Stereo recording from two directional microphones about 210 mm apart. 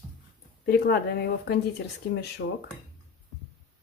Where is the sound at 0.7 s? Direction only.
50° left (ahead or behind).